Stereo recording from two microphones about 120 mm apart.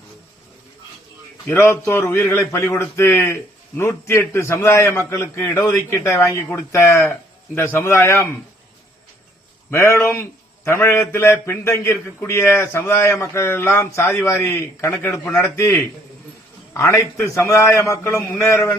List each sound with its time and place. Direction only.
1.5 s a man's voice: 20° left (ahead or behind)
9.6 s a man's voice: 20° left (ahead or behind)